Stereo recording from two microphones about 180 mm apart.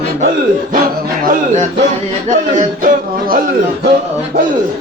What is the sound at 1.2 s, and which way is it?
Music, 50° right (ahead or behind).